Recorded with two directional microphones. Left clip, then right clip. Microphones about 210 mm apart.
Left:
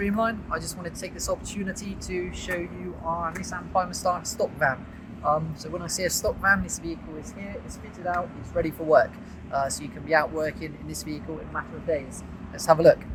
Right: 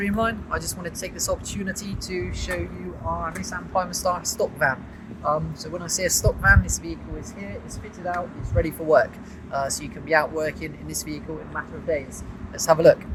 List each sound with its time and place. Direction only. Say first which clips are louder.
0.0 s speech: right 1 dB; 20° right (ahead or behind)
8.0 s speech: even; 10° right (ahead or behind)